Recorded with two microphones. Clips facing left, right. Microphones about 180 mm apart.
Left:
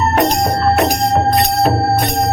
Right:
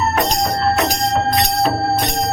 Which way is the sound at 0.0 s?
50° left (ahead or behind).